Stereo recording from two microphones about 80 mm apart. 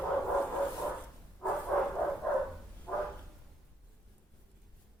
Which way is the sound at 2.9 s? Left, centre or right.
Centre.